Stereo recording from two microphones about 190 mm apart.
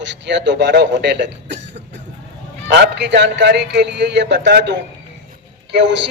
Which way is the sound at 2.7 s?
65° right (ahead or behind).